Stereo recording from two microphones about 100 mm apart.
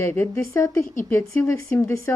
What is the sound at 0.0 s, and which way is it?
A woman's voice, 25° left (ahead or behind).